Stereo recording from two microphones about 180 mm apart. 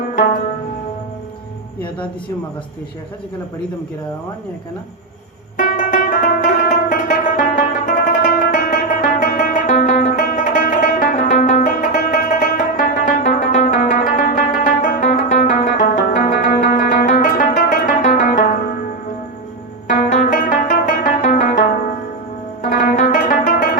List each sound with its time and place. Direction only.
5.5 s music: 45° left (ahead or behind)
20.0 s music: 45° left (ahead or behind)
23.0 s music: 45° left (ahead or behind)